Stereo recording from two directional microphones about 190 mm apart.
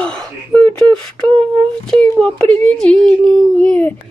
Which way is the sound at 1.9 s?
5° left (ahead or behind).